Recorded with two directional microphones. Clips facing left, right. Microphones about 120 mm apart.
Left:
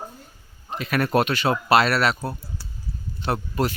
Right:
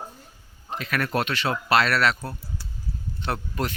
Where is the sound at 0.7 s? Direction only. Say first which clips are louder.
Left 4 dB; 10° left (ahead or behind).